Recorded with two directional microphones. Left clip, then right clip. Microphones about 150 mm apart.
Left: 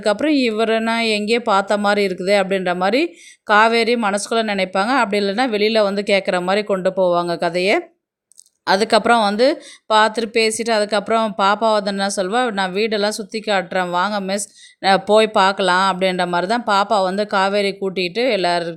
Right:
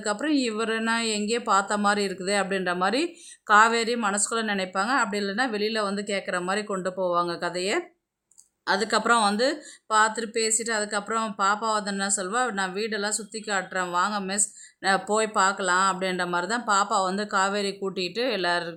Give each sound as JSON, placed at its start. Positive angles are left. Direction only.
{"t": 0.0, "sound": "speech", "side_deg": 35}